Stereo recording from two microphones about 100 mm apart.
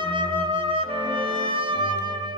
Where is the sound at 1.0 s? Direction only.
60° right (ahead or behind).